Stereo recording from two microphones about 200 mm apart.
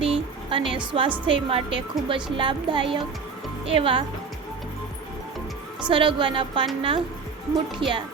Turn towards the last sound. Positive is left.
turn(degrees=-25)  # may be behind; listen again after turning